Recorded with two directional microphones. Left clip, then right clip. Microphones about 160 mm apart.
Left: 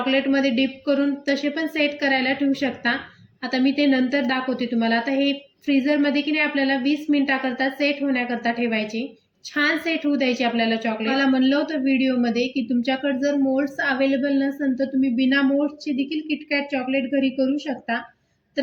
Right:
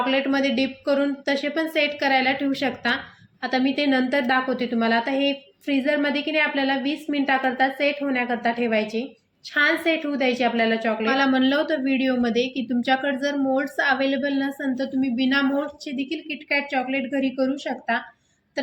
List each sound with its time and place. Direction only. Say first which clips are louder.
0.0 s a woman's voice: left 1 dB; 40° right (ahead or behind)